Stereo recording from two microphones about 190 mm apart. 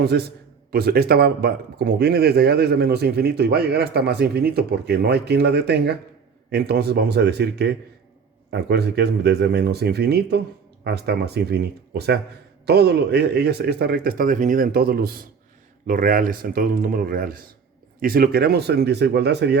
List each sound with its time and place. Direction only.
0.0 s speech: 60° right (ahead or behind)